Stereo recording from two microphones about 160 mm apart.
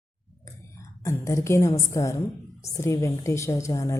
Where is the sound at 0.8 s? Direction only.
20° left (ahead or behind).